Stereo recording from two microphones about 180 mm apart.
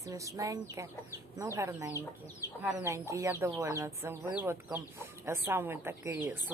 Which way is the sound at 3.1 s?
15° right (ahead or behind).